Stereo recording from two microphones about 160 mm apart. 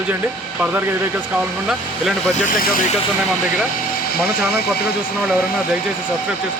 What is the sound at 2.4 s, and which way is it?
Speech, 60° left (ahead or behind).